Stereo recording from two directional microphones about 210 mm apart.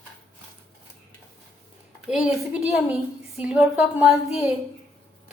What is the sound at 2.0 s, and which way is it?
A woman's voice, 5° right (ahead or behind).